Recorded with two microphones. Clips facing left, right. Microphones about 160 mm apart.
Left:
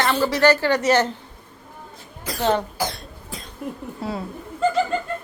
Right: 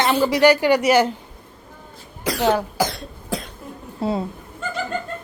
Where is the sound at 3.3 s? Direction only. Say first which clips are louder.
Right 11 dB; 75° right (ahead or behind).